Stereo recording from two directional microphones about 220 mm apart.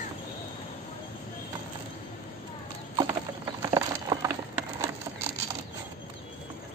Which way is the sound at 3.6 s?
15° right (ahead or behind).